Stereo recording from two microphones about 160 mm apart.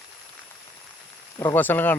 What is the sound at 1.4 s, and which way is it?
Speech, 10° left (ahead or behind).